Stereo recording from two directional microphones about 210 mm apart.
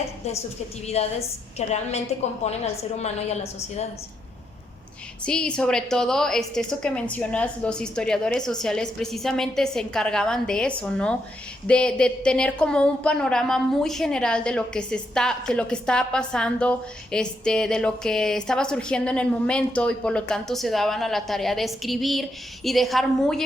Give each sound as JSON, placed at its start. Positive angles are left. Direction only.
{"t": 1.0, "sound": "a woman's voice", "side_deg": 30}
{"t": 3.0, "sound": "a woman's voice", "side_deg": 30}
{"t": 5.2, "sound": "speech", "side_deg": 5}